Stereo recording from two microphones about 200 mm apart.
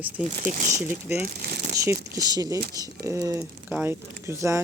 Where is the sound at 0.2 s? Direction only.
5° right (ahead or behind).